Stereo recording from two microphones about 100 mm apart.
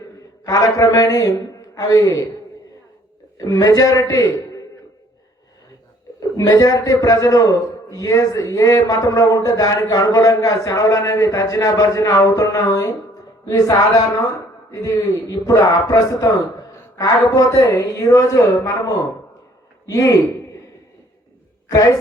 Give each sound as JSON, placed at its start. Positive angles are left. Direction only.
{"t": 0.4, "sound": "a man's voice", "side_deg": 35}
{"t": 3.3, "sound": "a man's voice", "side_deg": 35}
{"t": 6.1, "sound": "a man's voice", "side_deg": 35}
{"t": 19.9, "sound": "a man's voice", "side_deg": 35}